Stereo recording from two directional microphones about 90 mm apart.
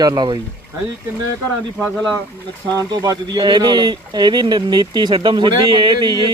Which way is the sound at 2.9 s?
50° right (ahead or behind).